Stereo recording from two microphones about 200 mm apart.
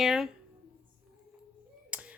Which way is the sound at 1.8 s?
5° right (ahead or behind).